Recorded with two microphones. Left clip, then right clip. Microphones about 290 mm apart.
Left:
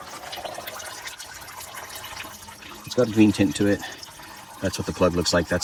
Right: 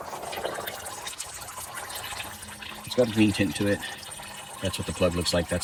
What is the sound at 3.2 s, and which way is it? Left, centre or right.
Speech, left.